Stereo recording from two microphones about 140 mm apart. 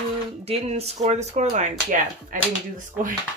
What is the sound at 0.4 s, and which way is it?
Speech, 45° right (ahead or behind).